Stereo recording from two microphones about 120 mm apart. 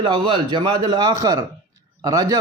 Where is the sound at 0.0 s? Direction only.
40° right (ahead or behind).